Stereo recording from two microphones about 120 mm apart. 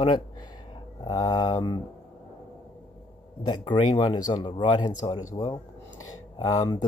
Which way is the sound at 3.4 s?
40° left (ahead or behind).